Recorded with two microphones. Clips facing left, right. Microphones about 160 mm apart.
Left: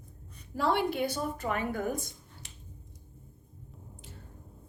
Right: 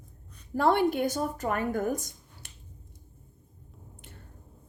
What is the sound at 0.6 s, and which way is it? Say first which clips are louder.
A woman's voice: right 4 dB; 55° right (ahead or behind).